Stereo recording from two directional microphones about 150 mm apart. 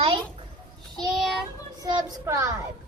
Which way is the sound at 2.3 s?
20° right (ahead or behind).